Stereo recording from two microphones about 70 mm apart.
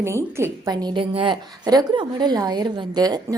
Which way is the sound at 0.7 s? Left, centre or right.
Right.